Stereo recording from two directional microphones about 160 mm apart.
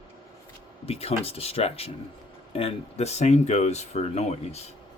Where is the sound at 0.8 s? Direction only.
40° left (ahead or behind).